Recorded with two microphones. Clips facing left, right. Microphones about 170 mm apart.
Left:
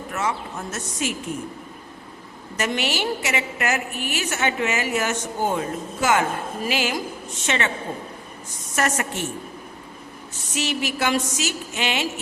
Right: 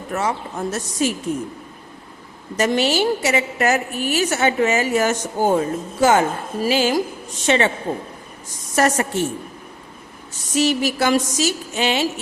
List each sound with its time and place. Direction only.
0.1 s a woman's voice: 35° right (ahead or behind)
2.6 s a woman's voice: 30° right (ahead or behind)
8.7 s a woman's voice: 35° right (ahead or behind)
10.5 s a woman's voice: 40° right (ahead or behind)